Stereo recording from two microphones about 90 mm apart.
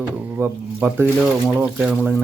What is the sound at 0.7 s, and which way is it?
Speech, 20° right (ahead or behind).